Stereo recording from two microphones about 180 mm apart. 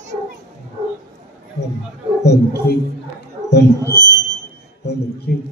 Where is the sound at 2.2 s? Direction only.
65° left (ahead or behind).